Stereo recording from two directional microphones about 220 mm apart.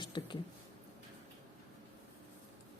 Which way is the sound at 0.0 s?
20° left (ahead or behind).